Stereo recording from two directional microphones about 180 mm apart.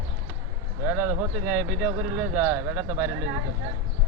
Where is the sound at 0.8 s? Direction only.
15° right (ahead or behind).